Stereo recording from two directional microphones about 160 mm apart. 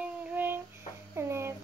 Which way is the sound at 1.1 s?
15° right (ahead or behind).